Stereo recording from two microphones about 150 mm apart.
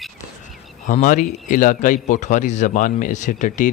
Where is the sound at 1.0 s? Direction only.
60° left (ahead or behind).